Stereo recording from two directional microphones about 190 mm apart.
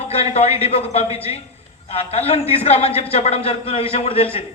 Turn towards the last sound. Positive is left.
turn(degrees=30)  # may be behind; listen again after turning